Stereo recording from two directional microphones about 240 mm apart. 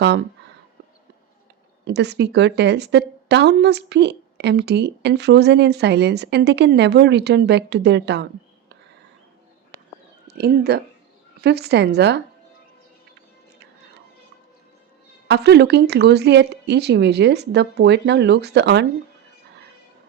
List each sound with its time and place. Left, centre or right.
1.9 s speech: right
10.2 s speech: right
15.3 s speech: right